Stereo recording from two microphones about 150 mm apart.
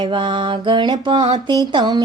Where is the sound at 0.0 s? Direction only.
35° right (ahead or behind).